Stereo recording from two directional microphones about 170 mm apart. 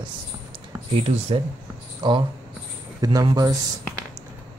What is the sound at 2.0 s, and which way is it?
Speech, 25° right (ahead or behind).